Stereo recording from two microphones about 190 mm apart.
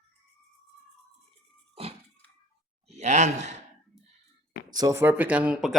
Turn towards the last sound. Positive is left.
turn(degrees=-5)  # may be behind; listen again after turning